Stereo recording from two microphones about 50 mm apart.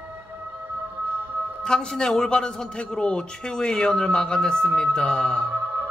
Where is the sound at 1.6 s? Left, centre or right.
Centre.